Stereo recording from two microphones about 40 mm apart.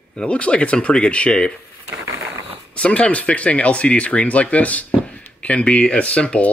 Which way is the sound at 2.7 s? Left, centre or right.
Left.